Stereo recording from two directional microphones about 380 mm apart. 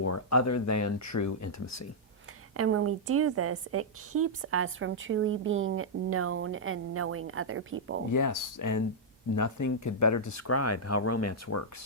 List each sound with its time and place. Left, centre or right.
0.0 s speech: left
2.6 s a woman's voice: right
8.1 s speech: left